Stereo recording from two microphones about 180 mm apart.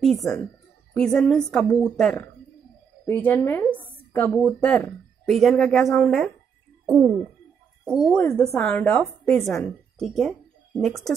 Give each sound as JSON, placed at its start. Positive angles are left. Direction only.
{"t": 0.0, "sound": "a woman's voice", "side_deg": 0}
{"t": 6.9, "sound": "bird", "side_deg": -15}
{"t": 7.8, "sound": "a woman's voice", "side_deg": -5}